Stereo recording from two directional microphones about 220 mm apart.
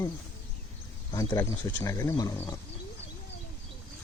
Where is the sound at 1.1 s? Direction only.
15° left (ahead or behind).